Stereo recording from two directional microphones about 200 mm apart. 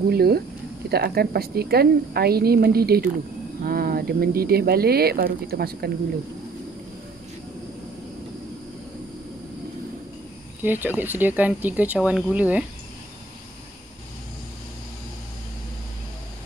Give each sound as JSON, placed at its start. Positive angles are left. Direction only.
{"t": 0.1, "sound": "a woman's voice", "side_deg": -50}
{"t": 10.6, "sound": "speech", "side_deg": -10}